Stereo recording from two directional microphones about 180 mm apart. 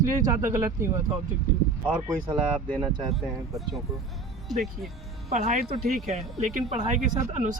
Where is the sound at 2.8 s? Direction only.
25° right (ahead or behind).